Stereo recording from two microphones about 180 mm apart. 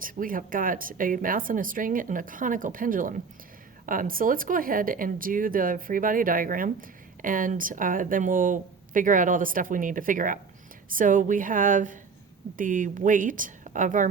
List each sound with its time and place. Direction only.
0.0 s speech: 50° right (ahead or behind)